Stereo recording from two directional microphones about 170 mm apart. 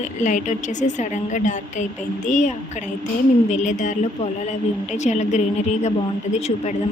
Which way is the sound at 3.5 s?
45° left (ahead or behind).